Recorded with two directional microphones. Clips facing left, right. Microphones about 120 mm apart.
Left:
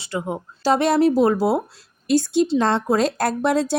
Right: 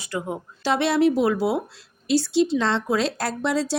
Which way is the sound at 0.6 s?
40° left (ahead or behind).